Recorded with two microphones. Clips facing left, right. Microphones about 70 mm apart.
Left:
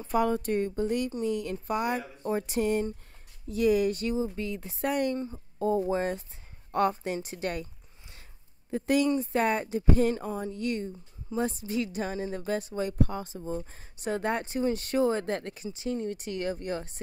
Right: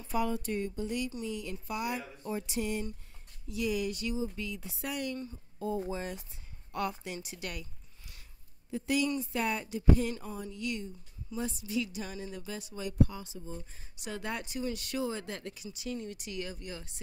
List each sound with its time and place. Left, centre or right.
0.1 s a woman's voice: left
8.6 s a woman's voice: left